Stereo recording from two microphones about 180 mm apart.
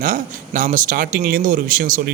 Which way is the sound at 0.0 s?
50° right (ahead or behind).